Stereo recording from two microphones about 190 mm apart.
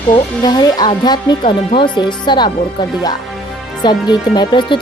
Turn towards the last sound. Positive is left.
turn(degrees=25)  # may be behind; listen again after turning